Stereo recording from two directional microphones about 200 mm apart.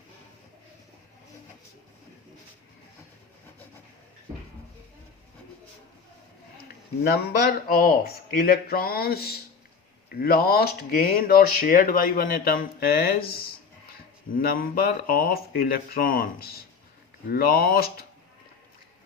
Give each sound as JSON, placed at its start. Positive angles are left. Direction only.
{"t": 6.6, "sound": "speech", "side_deg": 50}